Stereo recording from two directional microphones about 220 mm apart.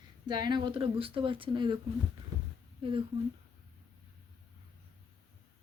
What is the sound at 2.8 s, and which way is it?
Speech, 25° right (ahead or behind).